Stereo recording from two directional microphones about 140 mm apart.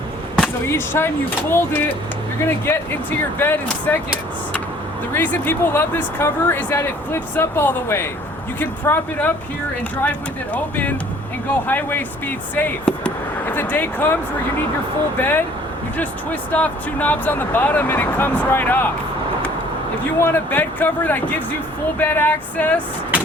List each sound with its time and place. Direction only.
0.7 s speech: 15° left (ahead or behind)
5.1 s speech: 15° left (ahead or behind)
15.2 s speech: 15° left (ahead or behind)
20.1 s speech: 15° left (ahead or behind)